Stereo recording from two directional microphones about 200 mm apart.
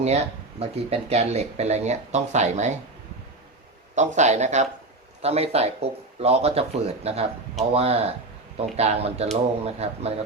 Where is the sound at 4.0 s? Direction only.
35° right (ahead or behind).